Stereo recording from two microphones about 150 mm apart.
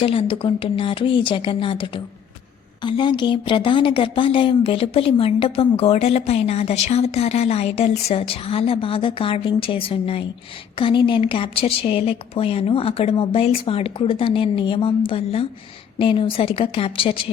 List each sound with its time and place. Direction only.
0.0 s speech: 40° left (ahead or behind)